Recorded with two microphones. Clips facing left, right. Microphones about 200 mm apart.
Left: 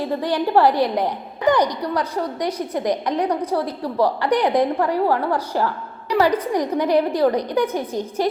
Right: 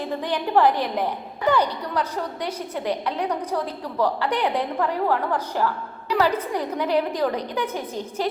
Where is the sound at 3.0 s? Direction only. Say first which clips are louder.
Left 5 dB; 35° left (ahead or behind).